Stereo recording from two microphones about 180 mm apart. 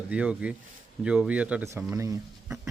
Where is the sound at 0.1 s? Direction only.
5° right (ahead or behind).